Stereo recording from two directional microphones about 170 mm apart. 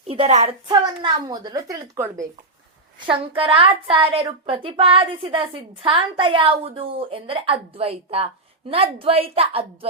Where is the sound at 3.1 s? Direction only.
30° right (ahead or behind).